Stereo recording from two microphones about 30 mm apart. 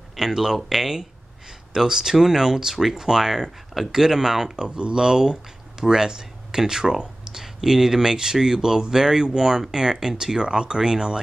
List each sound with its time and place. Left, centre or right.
0.3 s speech: centre
3.9 s speech: centre
4.6 s speech: right